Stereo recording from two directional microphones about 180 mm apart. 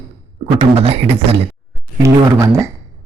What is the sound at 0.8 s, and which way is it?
Speech, 35° right (ahead or behind).